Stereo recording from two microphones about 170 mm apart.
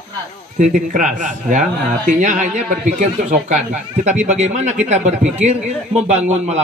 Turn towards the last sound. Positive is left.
turn(degrees=-40)  # may be behind; listen again after turning